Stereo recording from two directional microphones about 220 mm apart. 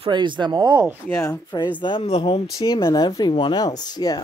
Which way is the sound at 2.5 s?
15° left (ahead or behind).